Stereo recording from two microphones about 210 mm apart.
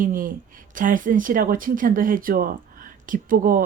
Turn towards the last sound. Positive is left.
turn(degrees=-40)  # may be behind; listen again after turning